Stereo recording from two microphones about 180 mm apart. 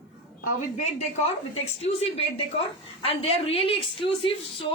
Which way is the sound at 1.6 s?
35° left (ahead or behind).